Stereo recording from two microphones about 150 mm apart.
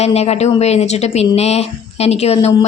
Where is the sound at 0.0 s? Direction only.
45° left (ahead or behind).